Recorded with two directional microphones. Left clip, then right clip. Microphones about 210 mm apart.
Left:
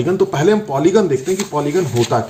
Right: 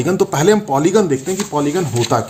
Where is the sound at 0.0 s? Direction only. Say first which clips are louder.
Even; 35° right (ahead or behind).